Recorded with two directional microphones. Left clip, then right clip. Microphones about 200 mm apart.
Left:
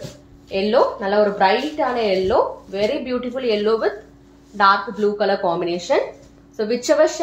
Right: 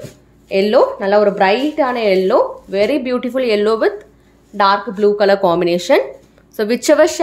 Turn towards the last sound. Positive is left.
turn(degrees=-50)  # may be behind; listen again after turning